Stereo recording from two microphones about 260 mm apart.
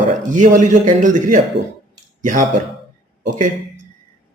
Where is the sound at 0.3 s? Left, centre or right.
Right.